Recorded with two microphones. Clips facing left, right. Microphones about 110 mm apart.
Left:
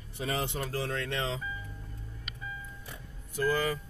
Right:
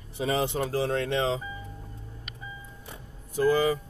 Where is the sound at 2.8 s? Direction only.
25° right (ahead or behind).